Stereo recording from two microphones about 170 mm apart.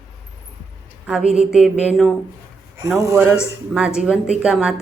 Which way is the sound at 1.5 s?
5° right (ahead or behind).